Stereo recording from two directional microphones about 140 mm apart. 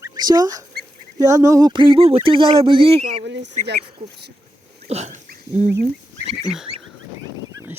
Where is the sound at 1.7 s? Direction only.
35° right (ahead or behind).